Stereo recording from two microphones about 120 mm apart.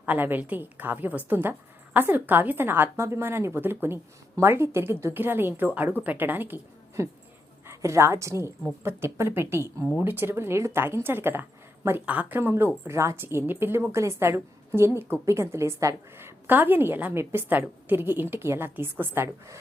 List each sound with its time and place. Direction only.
0.0 s a woman's voice: 15° right (ahead or behind)